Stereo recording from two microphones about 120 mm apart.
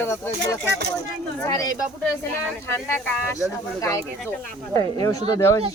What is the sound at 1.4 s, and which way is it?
Speech, 30° left (ahead or behind).